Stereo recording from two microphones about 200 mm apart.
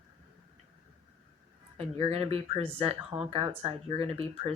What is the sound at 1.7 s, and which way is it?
Speech, 30° right (ahead or behind).